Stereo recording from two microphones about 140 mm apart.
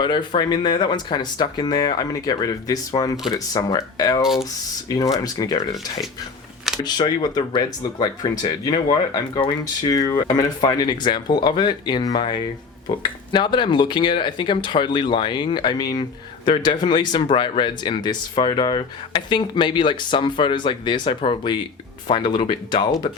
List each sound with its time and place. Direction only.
0.0 s speech: 35° left (ahead or behind)
6.8 s speech: 30° left (ahead or behind)